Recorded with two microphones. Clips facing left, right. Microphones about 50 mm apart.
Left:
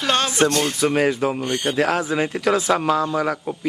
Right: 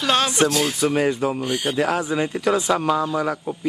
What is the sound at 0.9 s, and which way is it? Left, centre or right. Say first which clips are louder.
Speech: left 1 dB; centre.